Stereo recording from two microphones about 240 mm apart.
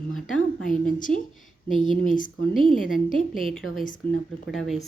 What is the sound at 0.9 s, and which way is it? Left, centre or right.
Speech, left.